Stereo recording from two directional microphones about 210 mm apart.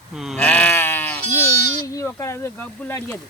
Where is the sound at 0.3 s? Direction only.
10° left (ahead or behind).